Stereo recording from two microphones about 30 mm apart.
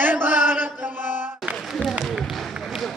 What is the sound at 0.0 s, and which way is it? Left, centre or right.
Chant, right.